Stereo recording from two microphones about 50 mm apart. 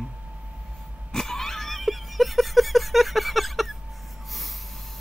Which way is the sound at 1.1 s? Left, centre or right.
Centre.